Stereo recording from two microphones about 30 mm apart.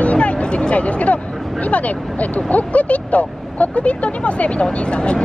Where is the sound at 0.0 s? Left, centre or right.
Left.